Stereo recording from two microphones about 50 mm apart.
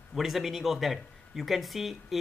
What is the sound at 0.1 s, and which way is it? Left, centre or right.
Speech, centre.